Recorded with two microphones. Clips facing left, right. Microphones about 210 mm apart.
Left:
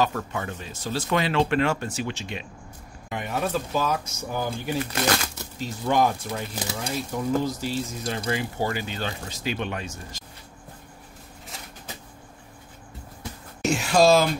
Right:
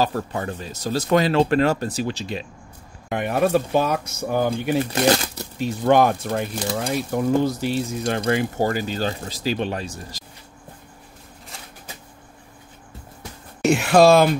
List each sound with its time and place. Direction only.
0.0 s speech: 35° right (ahead or behind)
3.1 s speech: 60° right (ahead or behind)
5.0 s speech: 35° right (ahead or behind)
5.6 s speech: 65° right (ahead or behind); by 10.2 s 35° right (ahead or behind)
13.6 s speech: 60° right (ahead or behind)